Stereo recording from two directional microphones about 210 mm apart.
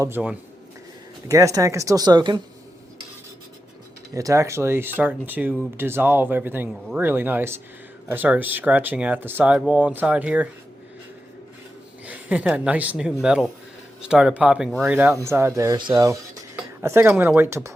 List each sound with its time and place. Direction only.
0.0 s speech: 10° right (ahead or behind)
4.1 s speech: 15° right (ahead or behind)
12.0 s a woman's voice: 5° right (ahead or behind)